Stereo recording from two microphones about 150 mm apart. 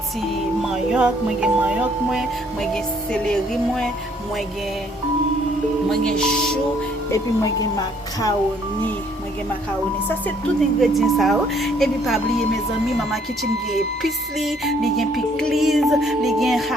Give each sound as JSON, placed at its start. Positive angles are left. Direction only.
{"t": 0.7, "sound": "music", "side_deg": -5}
{"t": 5.9, "sound": "music", "side_deg": 5}
{"t": 7.1, "sound": "a woman's voice", "side_deg": 25}
{"t": 10.8, "sound": "music", "side_deg": 0}